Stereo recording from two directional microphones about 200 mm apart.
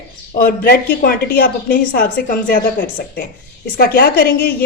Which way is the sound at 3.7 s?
50° left (ahead or behind).